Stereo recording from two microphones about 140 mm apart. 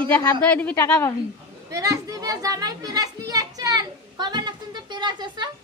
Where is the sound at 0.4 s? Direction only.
10° left (ahead or behind).